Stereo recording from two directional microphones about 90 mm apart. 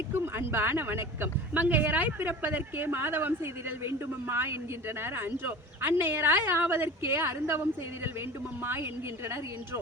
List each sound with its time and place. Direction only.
0.1 s speech: 25° right (ahead or behind)